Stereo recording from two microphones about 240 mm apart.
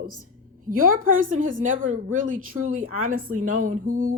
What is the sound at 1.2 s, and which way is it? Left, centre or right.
Speech, right.